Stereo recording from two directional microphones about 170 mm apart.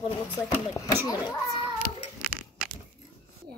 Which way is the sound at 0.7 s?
20° left (ahead or behind).